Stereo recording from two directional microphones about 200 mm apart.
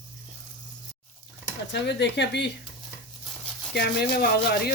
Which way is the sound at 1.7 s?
60° left (ahead or behind).